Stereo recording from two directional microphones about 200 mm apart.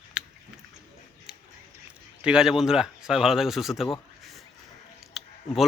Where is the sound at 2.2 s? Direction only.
5° right (ahead or behind).